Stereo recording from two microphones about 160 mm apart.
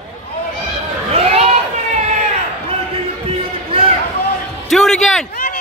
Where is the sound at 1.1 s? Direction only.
40° right (ahead or behind).